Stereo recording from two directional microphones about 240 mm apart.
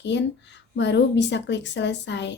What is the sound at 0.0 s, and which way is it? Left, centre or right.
Speech, left.